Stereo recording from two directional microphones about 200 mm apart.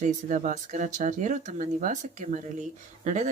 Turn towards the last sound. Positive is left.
turn(degrees=-35)  # may be behind; listen again after turning